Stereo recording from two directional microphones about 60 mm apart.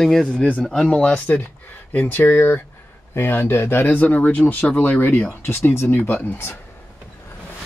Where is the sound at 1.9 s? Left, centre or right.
Left.